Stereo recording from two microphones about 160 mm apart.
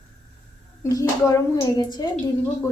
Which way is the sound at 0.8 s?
20° left (ahead or behind).